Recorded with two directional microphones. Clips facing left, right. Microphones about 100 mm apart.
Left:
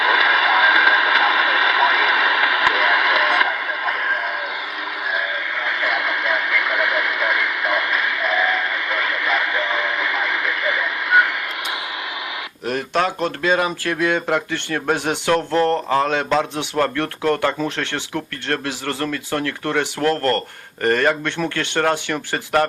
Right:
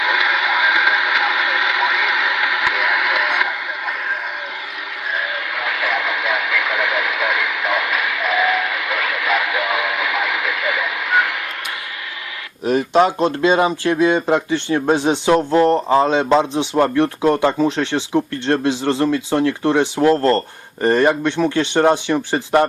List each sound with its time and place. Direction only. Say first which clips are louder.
0.0 s a sound: left 2 dB; 5° right (ahead or behind)
5.6 s radio: right 1 dB; centre (ahead or behind)
12.7 s speech: right 6 dB; 20° right (ahead or behind)